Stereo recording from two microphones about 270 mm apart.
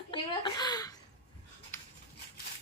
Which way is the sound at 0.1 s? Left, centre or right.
Centre.